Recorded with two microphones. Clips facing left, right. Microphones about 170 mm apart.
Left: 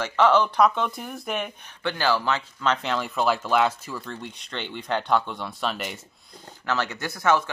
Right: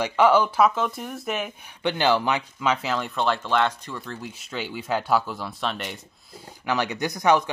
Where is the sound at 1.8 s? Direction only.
20° right (ahead or behind); by 5.9 s centre (ahead or behind).